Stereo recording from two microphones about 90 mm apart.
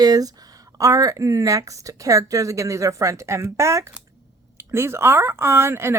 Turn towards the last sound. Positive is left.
turn(degrees=-30)  # may be behind; listen again after turning